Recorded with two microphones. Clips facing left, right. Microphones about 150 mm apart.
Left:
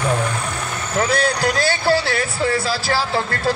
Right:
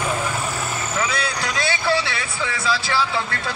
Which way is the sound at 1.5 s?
35° left (ahead or behind).